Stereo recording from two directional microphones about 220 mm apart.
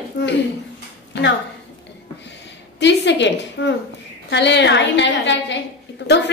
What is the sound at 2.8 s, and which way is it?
A woman's voice, 55° left (ahead or behind).